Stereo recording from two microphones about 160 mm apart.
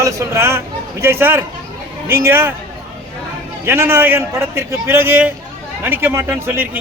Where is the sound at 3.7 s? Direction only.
15° right (ahead or behind).